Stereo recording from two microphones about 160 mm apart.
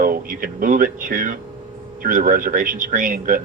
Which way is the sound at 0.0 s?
60° right (ahead or behind).